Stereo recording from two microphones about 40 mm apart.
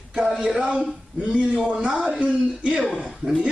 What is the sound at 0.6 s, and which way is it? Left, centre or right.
Speech, right.